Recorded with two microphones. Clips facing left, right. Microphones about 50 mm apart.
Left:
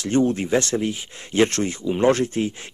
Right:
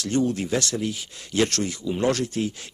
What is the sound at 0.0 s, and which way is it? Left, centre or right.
Speech, left.